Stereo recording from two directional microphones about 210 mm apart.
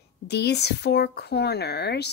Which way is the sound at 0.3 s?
50° left (ahead or behind).